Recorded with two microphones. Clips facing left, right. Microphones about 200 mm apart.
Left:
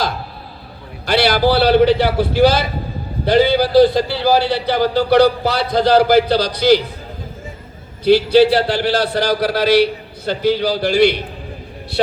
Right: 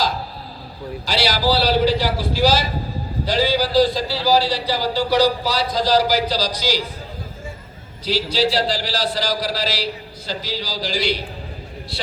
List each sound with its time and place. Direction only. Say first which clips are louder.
1.0 s a man's voice: left 6 dB; 60° left (ahead or behind)
8.0 s a man's voice: left 10 dB; 60° left (ahead or behind)